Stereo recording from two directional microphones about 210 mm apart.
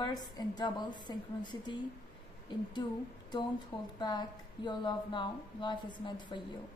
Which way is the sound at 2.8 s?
20° left (ahead or behind).